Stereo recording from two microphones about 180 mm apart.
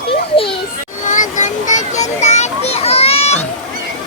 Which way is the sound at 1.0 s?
45° left (ahead or behind).